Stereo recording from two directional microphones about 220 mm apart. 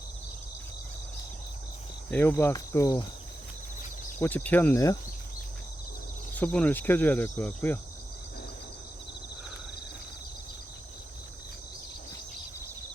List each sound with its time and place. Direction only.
2.0 s insect: 10° left (ahead or behind)
4.2 s insect: 10° left (ahead or behind)
6.3 s insect: 5° left (ahead or behind)